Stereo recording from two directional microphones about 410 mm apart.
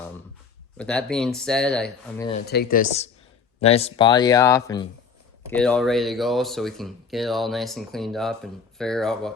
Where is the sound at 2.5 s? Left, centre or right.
Left.